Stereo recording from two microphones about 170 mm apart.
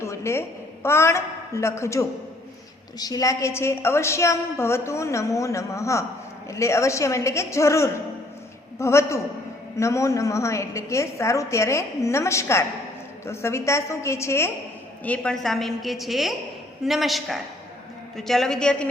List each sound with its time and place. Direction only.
0.0 s a woman's voice: 15° left (ahead or behind)